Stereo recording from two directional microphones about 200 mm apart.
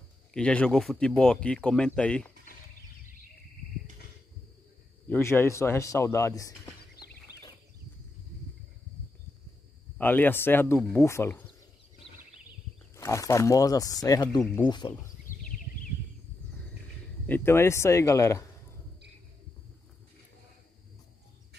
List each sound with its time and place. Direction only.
0.3 s speech: 5° left (ahead or behind)
5.0 s speech: 10° left (ahead or behind)
7.3 s a sound: 55° left (ahead or behind)
9.9 s speech: 10° left (ahead or behind)
12.9 s speech: 15° left (ahead or behind)
17.3 s speech: 10° left (ahead or behind)